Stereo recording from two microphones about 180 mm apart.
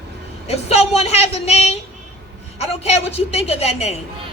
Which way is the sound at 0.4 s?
35° left (ahead or behind).